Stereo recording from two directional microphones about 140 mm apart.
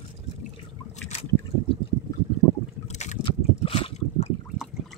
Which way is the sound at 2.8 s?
55° left (ahead or behind).